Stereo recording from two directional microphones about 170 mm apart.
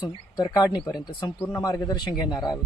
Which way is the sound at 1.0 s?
20° left (ahead or behind).